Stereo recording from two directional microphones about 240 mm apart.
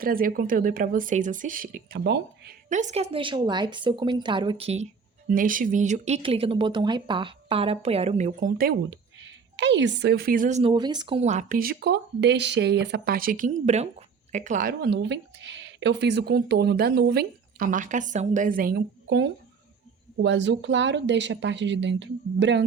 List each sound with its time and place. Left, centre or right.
0.0 s speech: right
8.3 s speech: right
10.6 s speech: centre; by 22.6 s right